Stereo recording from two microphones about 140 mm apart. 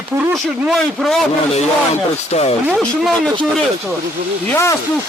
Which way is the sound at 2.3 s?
50° left (ahead or behind).